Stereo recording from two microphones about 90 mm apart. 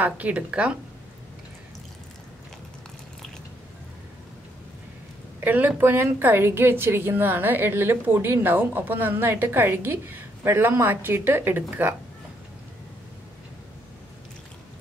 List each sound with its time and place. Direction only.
0.0 s speech: 15° right (ahead or behind)
5.4 s a woman's voice: 20° right (ahead or behind)